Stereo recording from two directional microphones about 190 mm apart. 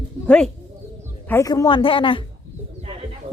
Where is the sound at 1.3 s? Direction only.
15° left (ahead or behind).